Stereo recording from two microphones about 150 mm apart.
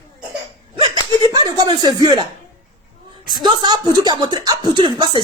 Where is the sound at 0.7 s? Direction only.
30° right (ahead or behind).